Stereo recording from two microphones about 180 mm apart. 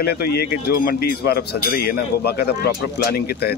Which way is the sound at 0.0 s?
60° left (ahead or behind).